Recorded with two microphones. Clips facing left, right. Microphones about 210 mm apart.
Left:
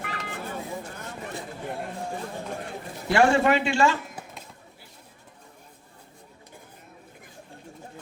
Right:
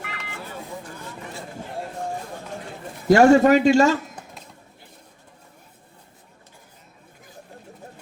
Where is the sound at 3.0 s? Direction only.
40° right (ahead or behind).